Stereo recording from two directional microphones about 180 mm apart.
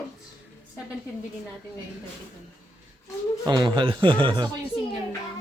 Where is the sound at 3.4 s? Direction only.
25° right (ahead or behind).